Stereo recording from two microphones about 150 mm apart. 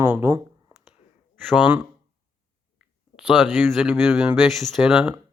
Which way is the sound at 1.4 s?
5° right (ahead or behind).